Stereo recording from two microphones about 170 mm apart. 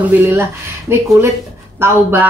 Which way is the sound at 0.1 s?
10° right (ahead or behind).